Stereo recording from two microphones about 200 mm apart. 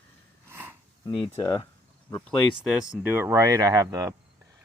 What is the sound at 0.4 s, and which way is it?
Snort, 10° right (ahead or behind).